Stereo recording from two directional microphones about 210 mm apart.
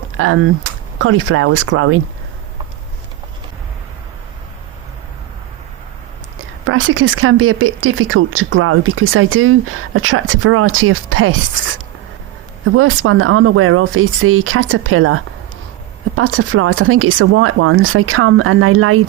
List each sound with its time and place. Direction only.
0.2 s speech: 75° right (ahead or behind)
6.7 s speech: 70° right (ahead or behind)
12.7 s speech: 90° right